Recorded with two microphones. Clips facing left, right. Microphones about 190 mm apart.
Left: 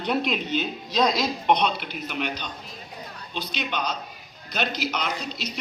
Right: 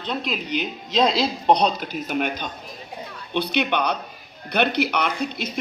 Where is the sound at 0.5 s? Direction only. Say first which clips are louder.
Right 2 dB; 20° right (ahead or behind); by 2.5 s 50° right (ahead or behind).